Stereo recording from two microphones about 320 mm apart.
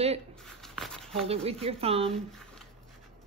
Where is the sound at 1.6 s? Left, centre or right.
Centre.